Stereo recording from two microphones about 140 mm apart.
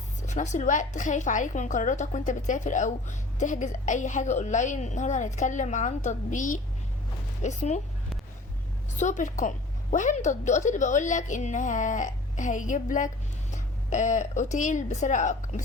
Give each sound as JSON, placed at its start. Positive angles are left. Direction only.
{"t": 0.2, "sound": "a woman's voice", "side_deg": 60}
{"t": 9.0, "sound": "a woman's voice", "side_deg": 60}